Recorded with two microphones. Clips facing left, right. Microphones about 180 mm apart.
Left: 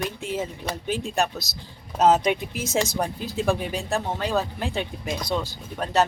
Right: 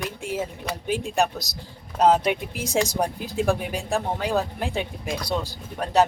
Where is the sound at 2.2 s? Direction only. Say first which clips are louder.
Left 1 dB; 10° right (ahead or behind).